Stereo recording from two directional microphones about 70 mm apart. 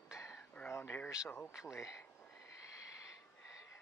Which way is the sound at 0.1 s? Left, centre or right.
Left.